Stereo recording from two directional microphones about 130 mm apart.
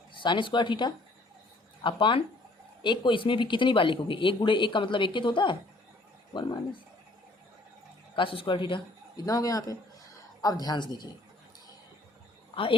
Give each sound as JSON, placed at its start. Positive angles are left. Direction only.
{"t": 0.2, "sound": "speech", "side_deg": 40}
{"t": 8.1, "sound": "a man's voice", "side_deg": 40}
{"t": 9.2, "sound": "a man's voice", "side_deg": 25}